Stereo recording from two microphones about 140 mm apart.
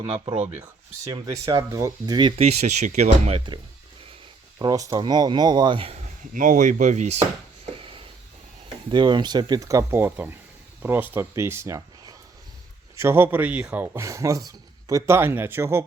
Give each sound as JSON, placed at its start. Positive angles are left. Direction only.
{"t": 0.0, "sound": "speech", "side_deg": -35}
{"t": 1.0, "sound": "speech", "side_deg": -25}
{"t": 2.4, "sound": "speech", "side_deg": -50}
{"t": 4.6, "sound": "speech", "side_deg": -25}
{"t": 6.3, "sound": "speech", "side_deg": -70}
{"t": 7.8, "sound": "a sound", "side_deg": -40}
{"t": 8.9, "sound": "speech", "side_deg": -35}